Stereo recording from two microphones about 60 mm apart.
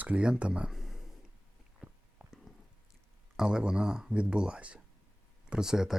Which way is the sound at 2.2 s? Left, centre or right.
Centre.